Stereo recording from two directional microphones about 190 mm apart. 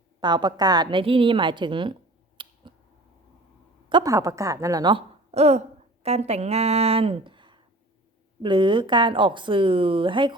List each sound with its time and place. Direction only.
0.2 s speech: 25° right (ahead or behind)
2.4 s cat: 25° right (ahead or behind)
3.8 s a woman's voice: 20° right (ahead or behind)